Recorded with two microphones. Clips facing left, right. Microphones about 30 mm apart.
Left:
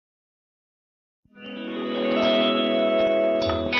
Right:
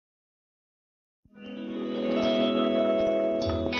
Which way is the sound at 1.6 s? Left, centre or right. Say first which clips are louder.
Left 4 dB; left.